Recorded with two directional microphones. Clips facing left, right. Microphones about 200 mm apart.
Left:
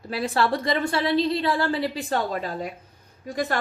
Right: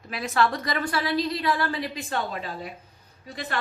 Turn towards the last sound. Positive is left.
turn(degrees=45)  # may be behind; listen again after turning